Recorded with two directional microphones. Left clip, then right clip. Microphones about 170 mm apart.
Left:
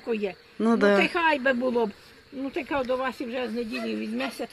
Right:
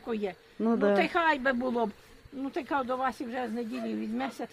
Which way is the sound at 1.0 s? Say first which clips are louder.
Left 3 dB; 10° right (ahead or behind).